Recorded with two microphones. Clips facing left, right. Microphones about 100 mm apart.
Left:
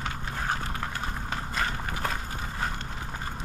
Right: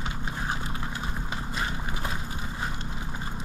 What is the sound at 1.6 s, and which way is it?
Walk, 50° left (ahead or behind).